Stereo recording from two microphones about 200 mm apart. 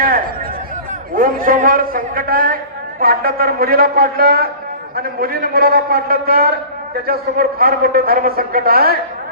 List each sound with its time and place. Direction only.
1.1 s a man's voice: 45° right (ahead or behind)